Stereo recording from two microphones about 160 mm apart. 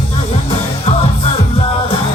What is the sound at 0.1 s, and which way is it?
Music, 40° left (ahead or behind).